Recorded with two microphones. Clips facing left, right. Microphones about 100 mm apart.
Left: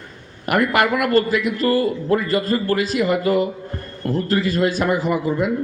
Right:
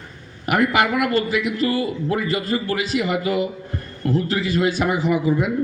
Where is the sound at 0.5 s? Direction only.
45° left (ahead or behind).